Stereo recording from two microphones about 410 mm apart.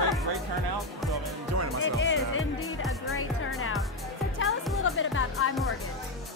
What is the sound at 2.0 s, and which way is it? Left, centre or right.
Music, left.